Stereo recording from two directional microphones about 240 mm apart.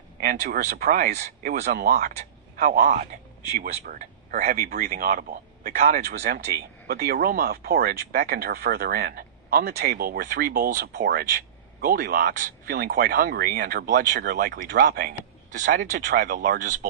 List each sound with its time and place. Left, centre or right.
0.2 s speech: right